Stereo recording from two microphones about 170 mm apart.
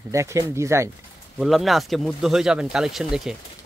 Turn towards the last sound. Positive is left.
turn(degrees=0)  # may be behind; listen again after turning